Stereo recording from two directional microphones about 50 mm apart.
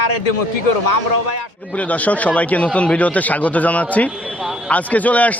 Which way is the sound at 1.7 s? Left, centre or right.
Left.